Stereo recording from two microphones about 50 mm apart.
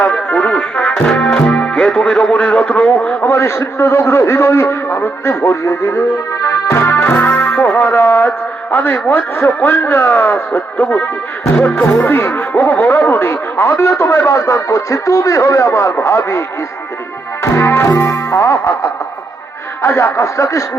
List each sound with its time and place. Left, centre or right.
0.3 s music: left
1.1 s music: centre
3.2 s a man's voice: left
5.5 s a man's voice: left
7.0 s music: left
8.7 s a man's voice: left
17.4 s music: left
17.9 s music: left
19.8 s speech: left
20.1 s music: left